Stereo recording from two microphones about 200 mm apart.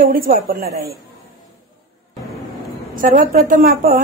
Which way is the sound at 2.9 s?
45° right (ahead or behind).